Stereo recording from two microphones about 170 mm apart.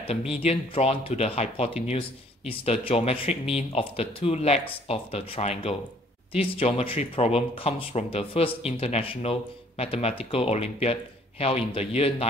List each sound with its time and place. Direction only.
0.3 s speech: 35° left (ahead or behind)